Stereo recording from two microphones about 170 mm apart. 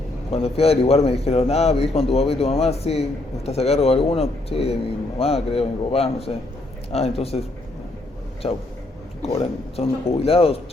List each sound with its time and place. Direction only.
0.3 s a man's voice: 35° left (ahead or behind)
8.4 s a man's voice: 35° left (ahead or behind)